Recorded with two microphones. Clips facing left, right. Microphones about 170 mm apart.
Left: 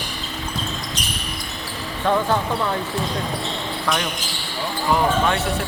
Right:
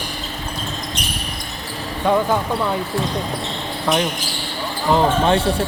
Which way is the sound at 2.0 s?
15° right (ahead or behind).